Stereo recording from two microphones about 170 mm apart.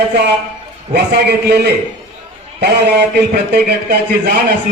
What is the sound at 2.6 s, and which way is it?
A man's voice, 80° right.